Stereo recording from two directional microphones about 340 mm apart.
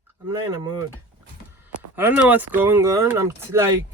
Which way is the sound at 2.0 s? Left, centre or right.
Centre.